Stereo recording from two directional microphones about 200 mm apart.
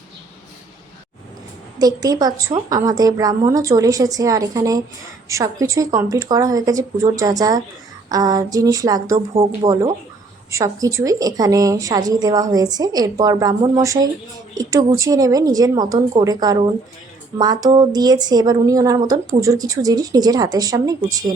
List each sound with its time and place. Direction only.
1.8 s a woman's voice: 20° right (ahead or behind)